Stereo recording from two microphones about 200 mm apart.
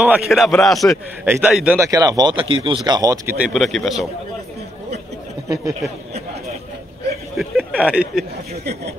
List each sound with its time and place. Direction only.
0.0 s a man's voice: 5° right (ahead or behind)
1.8 s speech: 15° right (ahead or behind); by 4.1 s centre (ahead or behind)
7.3 s a sound: 5° right (ahead or behind)